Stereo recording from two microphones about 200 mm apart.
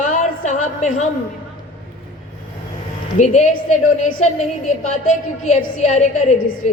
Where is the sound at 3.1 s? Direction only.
35° left (ahead or behind).